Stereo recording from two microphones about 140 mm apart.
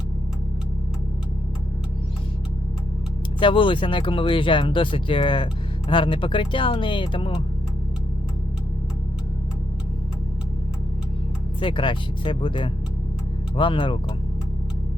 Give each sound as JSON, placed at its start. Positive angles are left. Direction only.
{"t": 3.4, "sound": "speech", "side_deg": 35}
{"t": 11.6, "sound": "speech", "side_deg": 35}